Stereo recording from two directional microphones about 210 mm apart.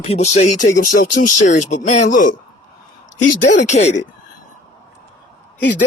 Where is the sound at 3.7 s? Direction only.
35° left (ahead or behind).